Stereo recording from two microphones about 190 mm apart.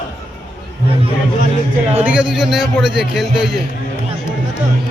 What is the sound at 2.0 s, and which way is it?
A man's voice, 5° right (ahead or behind).